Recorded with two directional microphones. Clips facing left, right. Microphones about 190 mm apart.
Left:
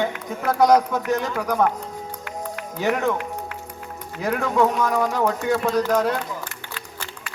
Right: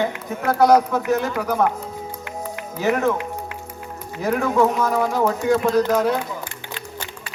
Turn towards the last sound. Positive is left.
turn(degrees=-20)  # may be behind; listen again after turning